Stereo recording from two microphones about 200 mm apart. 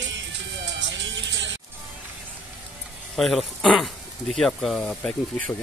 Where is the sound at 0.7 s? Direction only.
65° right (ahead or behind).